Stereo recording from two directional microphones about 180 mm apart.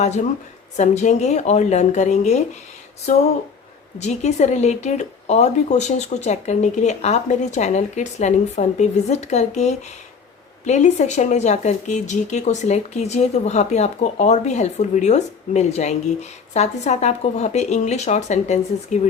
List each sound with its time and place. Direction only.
0.0 s speech: 40° left (ahead or behind)